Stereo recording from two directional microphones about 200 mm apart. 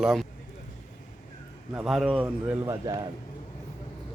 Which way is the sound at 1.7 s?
Centre (ahead or behind).